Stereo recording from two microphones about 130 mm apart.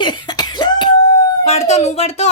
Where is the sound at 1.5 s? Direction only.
55° left (ahead or behind).